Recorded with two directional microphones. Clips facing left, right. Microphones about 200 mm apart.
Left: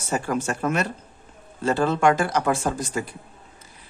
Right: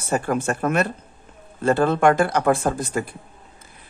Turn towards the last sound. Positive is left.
turn(degrees=-55)  # may be behind; listen again after turning